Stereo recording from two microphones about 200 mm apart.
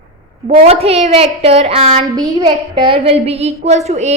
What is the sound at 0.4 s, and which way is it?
A woman's voice, 35° right (ahead or behind).